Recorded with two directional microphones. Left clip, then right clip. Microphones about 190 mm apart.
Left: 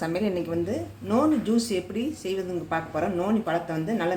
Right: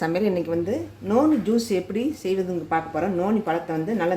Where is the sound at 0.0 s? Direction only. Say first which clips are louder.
Right 4 dB; 20° right (ahead or behind).